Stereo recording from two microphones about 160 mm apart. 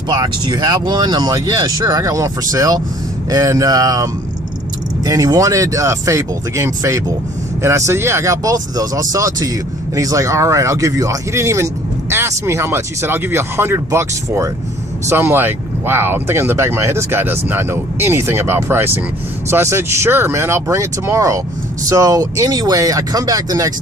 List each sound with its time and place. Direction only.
0.1 s speech: 25° right (ahead or behind)